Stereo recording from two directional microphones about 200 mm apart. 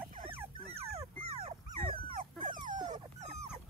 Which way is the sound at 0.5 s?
30° right (ahead or behind).